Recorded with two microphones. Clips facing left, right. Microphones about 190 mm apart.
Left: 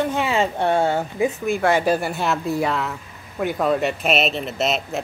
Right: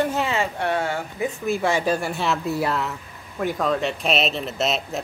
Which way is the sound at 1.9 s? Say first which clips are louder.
Left 2 dB; centre (ahead or behind).